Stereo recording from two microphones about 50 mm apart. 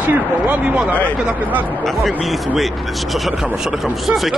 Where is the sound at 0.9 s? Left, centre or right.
Left.